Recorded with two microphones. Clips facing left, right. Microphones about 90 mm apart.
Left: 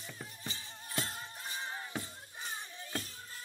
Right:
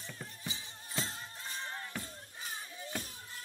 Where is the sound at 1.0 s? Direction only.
15° left (ahead or behind).